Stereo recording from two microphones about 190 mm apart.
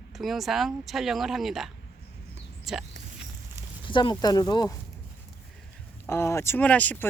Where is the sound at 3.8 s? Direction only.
25° left (ahead or behind).